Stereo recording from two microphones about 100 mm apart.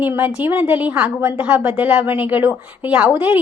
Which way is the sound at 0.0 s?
20° right (ahead or behind).